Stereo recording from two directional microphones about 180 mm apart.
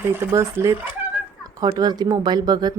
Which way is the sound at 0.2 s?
15° right (ahead or behind).